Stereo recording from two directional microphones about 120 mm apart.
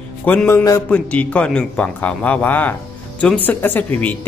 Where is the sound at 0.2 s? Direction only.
15° left (ahead or behind).